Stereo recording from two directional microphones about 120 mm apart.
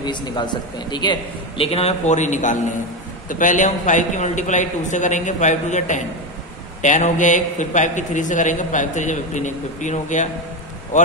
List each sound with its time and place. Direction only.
0.0 s speech: 40° left (ahead or behind)
1.6 s a man's voice: 55° left (ahead or behind); by 10.3 s 90° left